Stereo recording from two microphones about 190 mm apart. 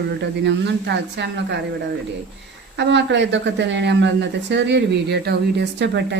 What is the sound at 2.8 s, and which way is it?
A woman's voice, 65° right (ahead or behind).